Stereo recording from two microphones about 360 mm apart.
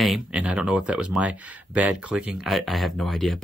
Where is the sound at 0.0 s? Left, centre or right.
Centre.